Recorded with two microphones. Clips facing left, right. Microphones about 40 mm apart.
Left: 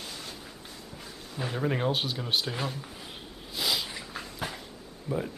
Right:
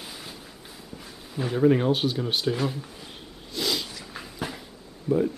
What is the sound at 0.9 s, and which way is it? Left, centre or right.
Speech, centre.